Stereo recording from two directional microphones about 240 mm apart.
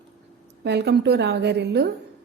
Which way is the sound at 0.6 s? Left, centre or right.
Right.